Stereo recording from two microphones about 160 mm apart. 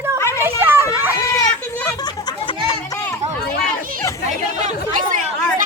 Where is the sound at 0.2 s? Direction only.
15° left (ahead or behind).